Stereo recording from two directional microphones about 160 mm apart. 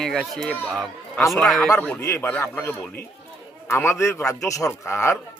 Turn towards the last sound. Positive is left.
turn(degrees=15)  # may be behind; listen again after turning